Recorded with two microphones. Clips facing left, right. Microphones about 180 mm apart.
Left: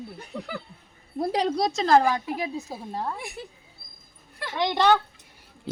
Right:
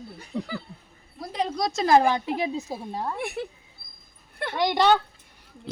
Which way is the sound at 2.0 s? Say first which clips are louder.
Right 2 dB; 25° right (ahead or behind).